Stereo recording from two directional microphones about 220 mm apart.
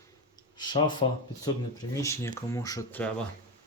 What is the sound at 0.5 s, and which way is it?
Speech, 20° left (ahead or behind).